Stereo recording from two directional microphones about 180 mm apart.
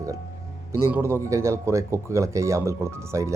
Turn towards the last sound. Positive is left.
turn(degrees=-15)  # may be behind; listen again after turning